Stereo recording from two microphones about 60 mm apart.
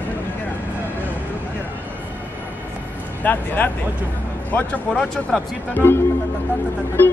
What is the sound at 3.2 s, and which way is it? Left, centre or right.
Speech, left.